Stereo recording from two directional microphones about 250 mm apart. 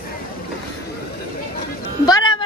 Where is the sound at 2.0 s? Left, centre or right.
Centre.